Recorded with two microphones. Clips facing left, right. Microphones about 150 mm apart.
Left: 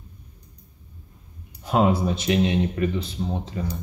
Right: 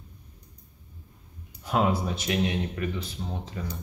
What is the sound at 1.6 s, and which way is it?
Speech, 25° left (ahead or behind).